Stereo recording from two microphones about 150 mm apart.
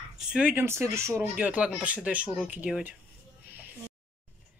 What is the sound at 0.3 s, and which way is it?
Speech, 10° right (ahead or behind).